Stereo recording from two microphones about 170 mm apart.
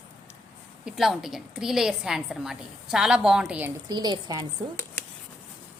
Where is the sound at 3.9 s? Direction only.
25° right (ahead or behind).